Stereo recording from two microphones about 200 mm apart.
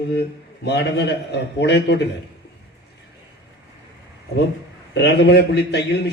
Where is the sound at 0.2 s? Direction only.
55° left (ahead or behind).